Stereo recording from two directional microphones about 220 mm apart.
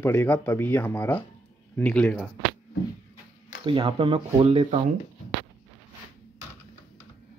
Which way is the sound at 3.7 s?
25° right (ahead or behind).